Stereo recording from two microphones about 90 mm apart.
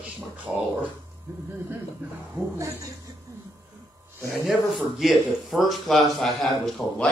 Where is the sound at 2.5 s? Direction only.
35° right (ahead or behind).